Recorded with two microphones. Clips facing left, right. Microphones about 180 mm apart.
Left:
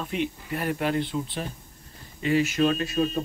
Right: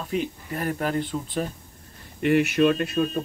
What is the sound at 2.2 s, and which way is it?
Speech, 60° right (ahead or behind).